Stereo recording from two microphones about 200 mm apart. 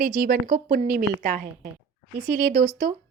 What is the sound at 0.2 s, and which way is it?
A woman's voice, 45° right (ahead or behind).